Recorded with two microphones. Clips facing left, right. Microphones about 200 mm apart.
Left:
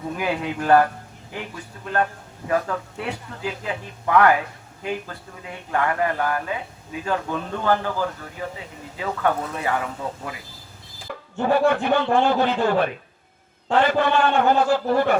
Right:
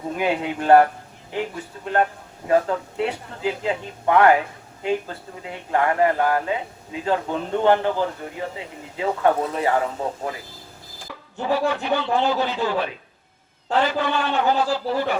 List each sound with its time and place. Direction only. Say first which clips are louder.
0.2 s speech: right 3 dB; 25° right (ahead or behind)
11.3 s speech: left 3 dB; 55° left (ahead or behind)